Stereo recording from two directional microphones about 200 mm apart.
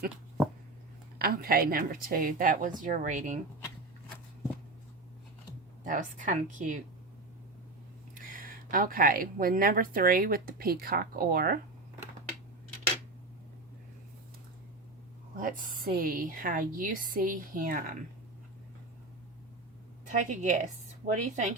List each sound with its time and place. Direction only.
1.2 s speech: 50° right (ahead or behind)
5.8 s speech: 40° right (ahead or behind)
8.1 s speech: 45° right (ahead or behind)
15.4 s speech: 40° right (ahead or behind)
20.1 s speech: 40° right (ahead or behind)